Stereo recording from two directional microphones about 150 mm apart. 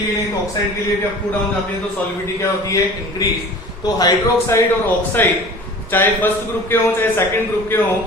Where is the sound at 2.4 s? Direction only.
20° left (ahead or behind).